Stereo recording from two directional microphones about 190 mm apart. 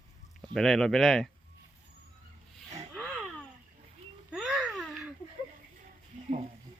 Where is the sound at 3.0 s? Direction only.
Centre (ahead or behind).